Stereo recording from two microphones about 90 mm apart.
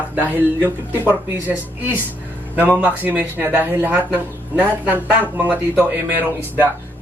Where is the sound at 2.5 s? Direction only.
20° right (ahead or behind).